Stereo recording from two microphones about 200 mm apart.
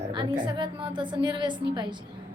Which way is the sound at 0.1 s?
25° right (ahead or behind).